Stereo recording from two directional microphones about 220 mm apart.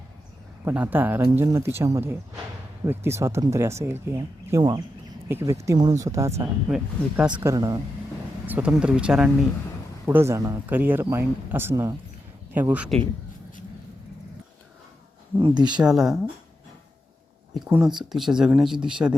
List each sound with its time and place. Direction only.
0.6 s speech: 10° right (ahead or behind)
6.7 s speech: 5° right (ahead or behind)
7.3 s speech: 15° right (ahead or behind)
15.4 s speech: 20° right (ahead or behind)
15.9 s speech: centre (ahead or behind)
17.7 s speech: 10° right (ahead or behind)